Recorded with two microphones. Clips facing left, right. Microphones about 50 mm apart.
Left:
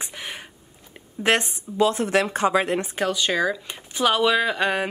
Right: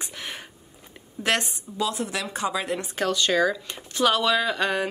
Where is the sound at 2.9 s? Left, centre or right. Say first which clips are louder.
Right 5 dB; centre.